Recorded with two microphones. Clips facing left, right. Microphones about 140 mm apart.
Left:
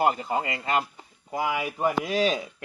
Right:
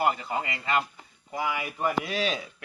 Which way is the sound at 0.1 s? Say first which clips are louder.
Left 3 dB; 40° left (ahead or behind).